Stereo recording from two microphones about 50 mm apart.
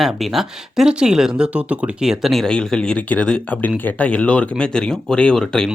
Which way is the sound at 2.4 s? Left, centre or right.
Centre.